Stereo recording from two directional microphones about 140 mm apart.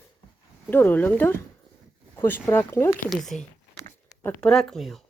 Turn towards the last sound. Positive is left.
turn(degrees=0)  # may be behind; listen again after turning